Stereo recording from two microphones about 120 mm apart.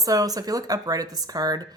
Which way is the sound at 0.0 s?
30° right (ahead or behind).